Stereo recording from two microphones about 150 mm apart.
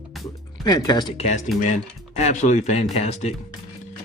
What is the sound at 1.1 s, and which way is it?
Speech, 45° left (ahead or behind).